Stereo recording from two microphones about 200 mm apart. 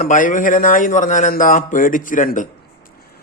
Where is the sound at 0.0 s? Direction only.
40° left (ahead or behind).